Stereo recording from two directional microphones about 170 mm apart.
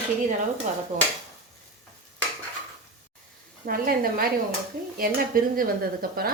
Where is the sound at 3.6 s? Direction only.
60° right (ahead or behind).